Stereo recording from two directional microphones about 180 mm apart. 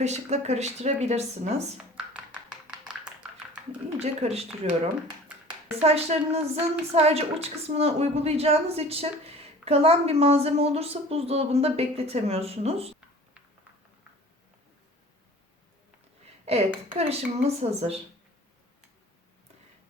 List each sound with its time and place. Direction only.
0.0 s a woman's voice: 40° right (ahead or behind)
2.1 s tap: 5° right (ahead or behind)
4.0 s a woman's voice: 35° right (ahead or behind)
5.8 s a woman's voice: 35° right (ahead or behind)
16.5 s a woman's voice: 35° right (ahead or behind)